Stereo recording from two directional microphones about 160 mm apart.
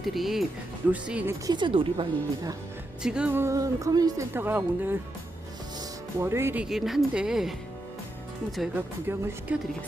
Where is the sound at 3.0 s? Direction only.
5° right (ahead or behind).